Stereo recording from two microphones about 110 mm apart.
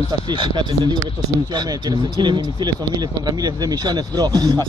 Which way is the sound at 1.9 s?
40° right (ahead or behind).